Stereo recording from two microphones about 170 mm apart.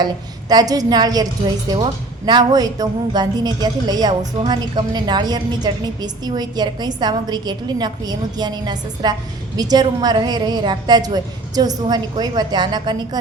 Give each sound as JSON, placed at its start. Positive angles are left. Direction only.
{"t": 0.0, "sound": "a woman's voice", "side_deg": -25}